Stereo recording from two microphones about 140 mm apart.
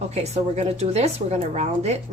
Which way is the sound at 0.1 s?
50° right (ahead or behind).